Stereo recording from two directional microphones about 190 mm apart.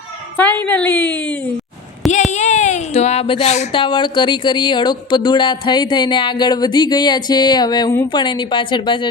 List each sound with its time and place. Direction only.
0.3 s a woman's voice: 10° left (ahead or behind)
2.3 s a sound: 40° left (ahead or behind)
3.7 s speech: 25° left (ahead or behind)